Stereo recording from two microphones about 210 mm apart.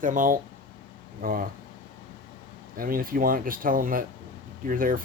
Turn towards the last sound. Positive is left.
turn(degrees=-40)  # may be behind; listen again after turning